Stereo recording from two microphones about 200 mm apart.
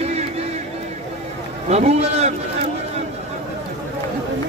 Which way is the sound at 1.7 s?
35° right (ahead or behind).